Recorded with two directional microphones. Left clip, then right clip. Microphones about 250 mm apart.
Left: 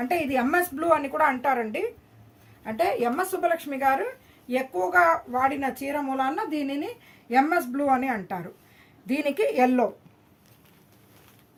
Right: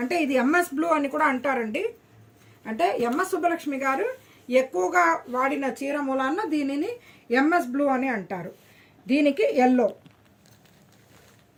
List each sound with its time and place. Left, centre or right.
0.1 s a woman's voice: left